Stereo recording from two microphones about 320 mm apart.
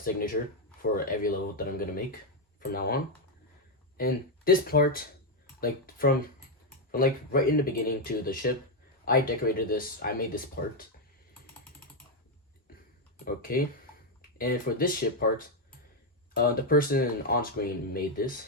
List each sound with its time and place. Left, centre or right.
0.0 s speech: left
13.1 s speech: left